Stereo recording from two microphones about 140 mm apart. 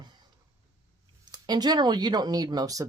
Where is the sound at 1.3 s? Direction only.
30° right (ahead or behind).